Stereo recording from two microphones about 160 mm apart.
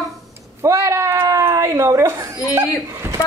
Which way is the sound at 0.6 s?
15° right (ahead or behind).